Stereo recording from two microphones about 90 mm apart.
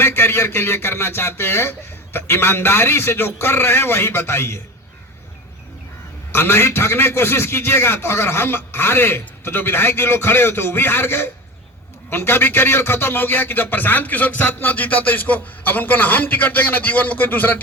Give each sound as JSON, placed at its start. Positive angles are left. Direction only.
{"t": 0.0, "sound": "a man's voice", "side_deg": 25}
{"t": 6.3, "sound": "a man's voice", "side_deg": 25}